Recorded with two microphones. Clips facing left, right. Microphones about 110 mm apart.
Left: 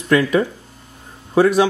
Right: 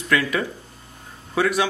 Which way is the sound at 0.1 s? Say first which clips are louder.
Left 7 dB; 25° left (ahead or behind).